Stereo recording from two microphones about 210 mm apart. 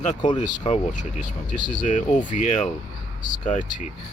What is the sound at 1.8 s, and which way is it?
Speech, 35° left (ahead or behind).